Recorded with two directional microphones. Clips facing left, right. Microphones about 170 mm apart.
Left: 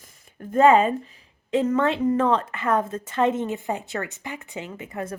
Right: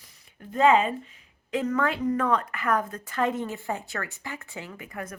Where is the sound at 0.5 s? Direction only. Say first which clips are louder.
Left 4 dB; 45° left (ahead or behind).